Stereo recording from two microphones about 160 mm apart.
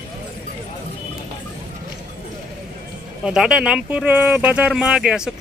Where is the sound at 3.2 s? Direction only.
5° right (ahead or behind).